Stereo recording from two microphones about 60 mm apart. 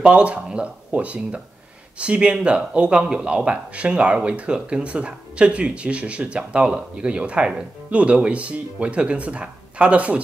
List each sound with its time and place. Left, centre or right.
0.0 s speech: centre